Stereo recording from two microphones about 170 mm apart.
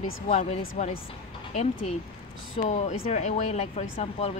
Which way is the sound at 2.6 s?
40° left (ahead or behind).